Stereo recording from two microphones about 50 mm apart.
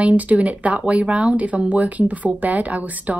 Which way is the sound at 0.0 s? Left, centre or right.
Right.